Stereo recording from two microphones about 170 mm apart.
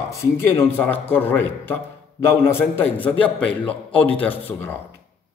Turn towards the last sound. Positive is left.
turn(degrees=10)  # may be behind; listen again after turning